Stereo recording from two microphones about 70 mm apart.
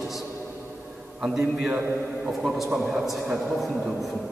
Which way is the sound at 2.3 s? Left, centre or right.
Centre.